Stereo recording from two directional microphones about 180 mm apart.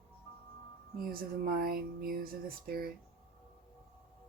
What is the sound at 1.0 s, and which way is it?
Speech, 55° right (ahead or behind).